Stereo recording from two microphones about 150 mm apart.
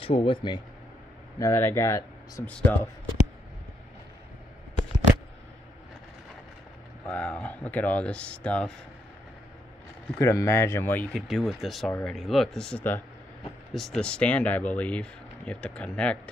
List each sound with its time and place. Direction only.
0.0 s speech: 35° left (ahead or behind)
1.4 s speech: 15° left (ahead or behind)
7.1 s speech: 10° left (ahead or behind)
10.1 s speech: 20° left (ahead or behind)